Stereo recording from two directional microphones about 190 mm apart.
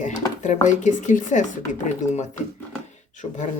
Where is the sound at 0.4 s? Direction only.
40° left (ahead or behind).